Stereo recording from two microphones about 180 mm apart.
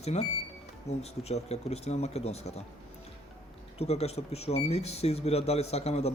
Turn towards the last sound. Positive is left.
turn(degrees=35)  # may be behind; listen again after turning